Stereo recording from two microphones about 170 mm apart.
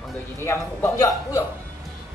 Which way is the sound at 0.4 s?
15° left (ahead or behind).